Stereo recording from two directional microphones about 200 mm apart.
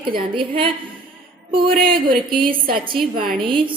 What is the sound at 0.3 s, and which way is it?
Speech, 25° right (ahead or behind).